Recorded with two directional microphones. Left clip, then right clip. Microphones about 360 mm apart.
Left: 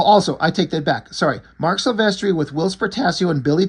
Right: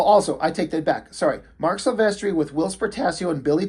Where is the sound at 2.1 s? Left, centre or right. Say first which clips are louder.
Left 3 dB; left.